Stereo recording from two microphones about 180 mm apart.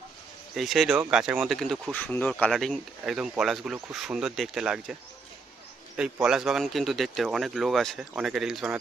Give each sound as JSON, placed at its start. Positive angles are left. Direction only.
{"t": 0.5, "sound": "speech", "side_deg": 0}
{"t": 6.0, "sound": "speech", "side_deg": -5}